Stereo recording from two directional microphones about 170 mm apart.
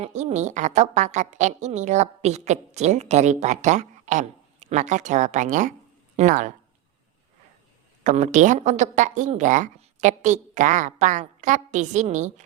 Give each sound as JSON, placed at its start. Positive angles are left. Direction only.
{"t": 0.0, "sound": "a woman's voice", "side_deg": -40}
{"t": 8.0, "sound": "a woman's voice", "side_deg": -45}